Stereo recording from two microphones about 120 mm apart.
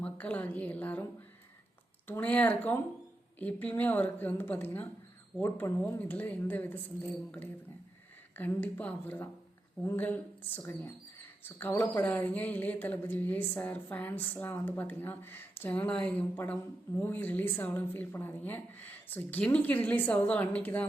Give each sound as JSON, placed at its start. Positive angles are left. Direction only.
{"t": 0.0, "sound": "speech", "side_deg": 15}
{"t": 2.0, "sound": "speech", "side_deg": 15}